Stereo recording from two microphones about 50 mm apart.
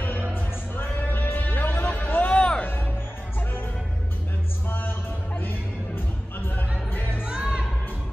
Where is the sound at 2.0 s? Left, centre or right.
Left.